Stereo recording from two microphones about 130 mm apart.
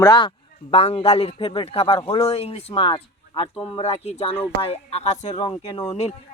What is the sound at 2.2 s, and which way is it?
Speech, 50° left (ahead or behind).